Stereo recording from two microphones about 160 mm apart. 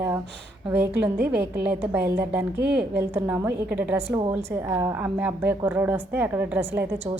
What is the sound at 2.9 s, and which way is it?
A woman's voice, 15° right (ahead or behind).